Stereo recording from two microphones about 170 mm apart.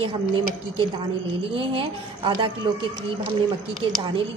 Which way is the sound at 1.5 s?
30° right (ahead or behind).